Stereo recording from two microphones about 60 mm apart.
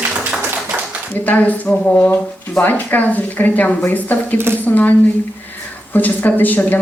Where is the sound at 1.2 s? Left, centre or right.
Left.